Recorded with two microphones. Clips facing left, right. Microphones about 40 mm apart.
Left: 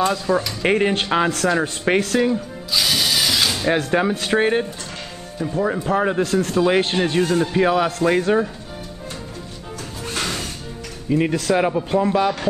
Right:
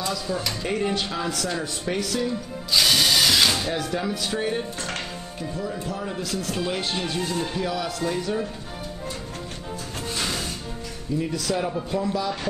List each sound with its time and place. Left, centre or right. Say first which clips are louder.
0.0 s speech: left 8 dB; left
2.7 s ratchet: even; centre
3.6 s speech: left 8 dB; left
11.1 s speech: left 7 dB; left